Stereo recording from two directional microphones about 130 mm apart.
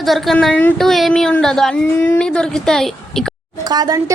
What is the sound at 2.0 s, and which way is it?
Speech, 15° left (ahead or behind).